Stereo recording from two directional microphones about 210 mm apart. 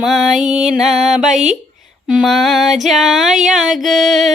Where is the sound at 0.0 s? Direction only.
Centre (ahead or behind).